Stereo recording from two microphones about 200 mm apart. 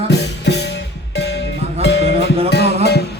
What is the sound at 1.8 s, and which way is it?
Music, 60° left (ahead or behind).